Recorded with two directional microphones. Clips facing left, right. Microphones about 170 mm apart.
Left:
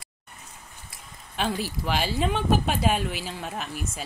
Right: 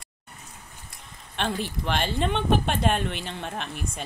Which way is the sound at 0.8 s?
5° left (ahead or behind).